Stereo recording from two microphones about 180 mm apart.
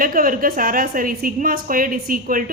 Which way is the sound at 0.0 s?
50° right (ahead or behind).